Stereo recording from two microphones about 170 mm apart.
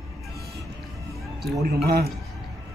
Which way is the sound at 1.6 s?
65° right (ahead or behind).